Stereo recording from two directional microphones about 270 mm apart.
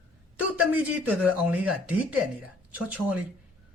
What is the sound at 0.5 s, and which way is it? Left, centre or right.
Speech, centre.